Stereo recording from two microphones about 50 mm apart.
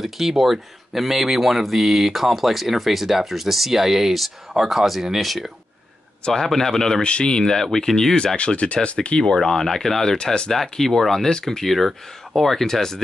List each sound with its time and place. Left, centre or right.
0.0 s speech: centre
7.1 s speech: centre
8.4 s speech: left; by 10.1 s centre
10.1 s speech: centre
10.5 s speech: centre